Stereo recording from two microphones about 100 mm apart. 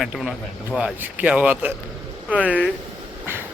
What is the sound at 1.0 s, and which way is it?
A man's voice, 15° right (ahead or behind).